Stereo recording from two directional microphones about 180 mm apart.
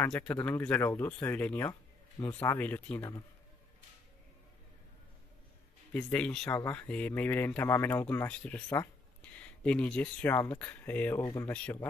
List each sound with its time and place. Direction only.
0.0 s speech: 5° left (ahead or behind)
1.7 s a sound: 20° left (ahead or behind)
2.3 s speech: 10° left (ahead or behind)
5.9 s speech: 5° left (ahead or behind)